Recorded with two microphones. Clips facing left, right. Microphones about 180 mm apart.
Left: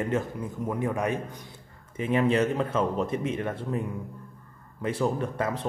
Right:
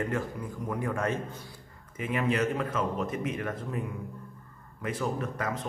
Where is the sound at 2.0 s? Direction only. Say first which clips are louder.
Left 5 dB; 30° left (ahead or behind).